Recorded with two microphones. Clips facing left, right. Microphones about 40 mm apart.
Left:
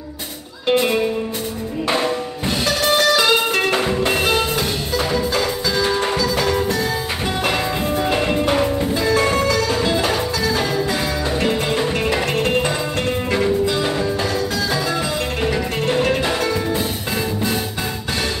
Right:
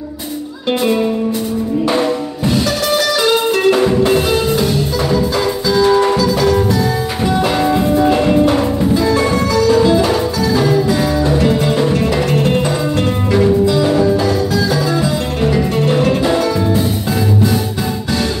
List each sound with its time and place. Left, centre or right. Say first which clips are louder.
3.0 s music: right 2 dB; left
3.7 s music: right 6 dB; centre
5.9 s music: right 11 dB; centre
8.1 s music: right 6 dB; centre
9.9 s music: right 5 dB; left
13.3 s music: right 7 dB; centre